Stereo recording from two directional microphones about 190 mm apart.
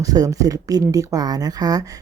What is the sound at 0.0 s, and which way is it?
Speech, 20° right (ahead or behind).